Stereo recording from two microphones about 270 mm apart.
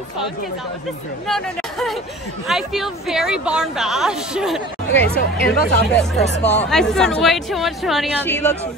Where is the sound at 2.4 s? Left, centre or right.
Centre.